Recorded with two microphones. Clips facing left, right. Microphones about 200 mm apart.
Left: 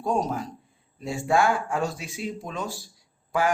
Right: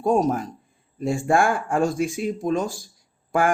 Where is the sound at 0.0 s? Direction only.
50° right (ahead or behind).